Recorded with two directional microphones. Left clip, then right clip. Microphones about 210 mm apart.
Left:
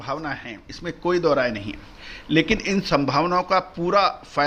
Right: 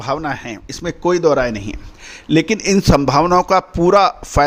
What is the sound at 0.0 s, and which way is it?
Speech, 50° right (ahead or behind).